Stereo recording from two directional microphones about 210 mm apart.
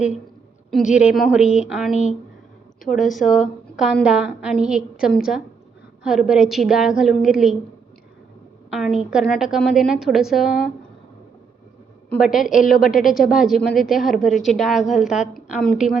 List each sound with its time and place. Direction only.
0.7 s a woman's voice: 5° right (ahead or behind)
1.9 s speech: 35° left (ahead or behind)
3.1 s a woman's voice: centre (ahead or behind)
8.7 s a woman's voice: centre (ahead or behind)
12.2 s a woman's voice: centre (ahead or behind)
12.7 s speech: 40° left (ahead or behind)
13.1 s a woman's voice: centre (ahead or behind)